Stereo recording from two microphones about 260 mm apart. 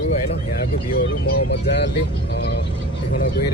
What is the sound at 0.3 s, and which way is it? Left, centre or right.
Speech, left.